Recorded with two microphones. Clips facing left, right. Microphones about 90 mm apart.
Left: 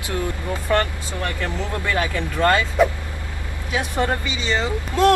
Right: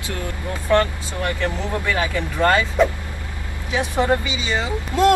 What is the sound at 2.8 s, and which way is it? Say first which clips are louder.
Speech: left 1 dB; 5° left (ahead or behind).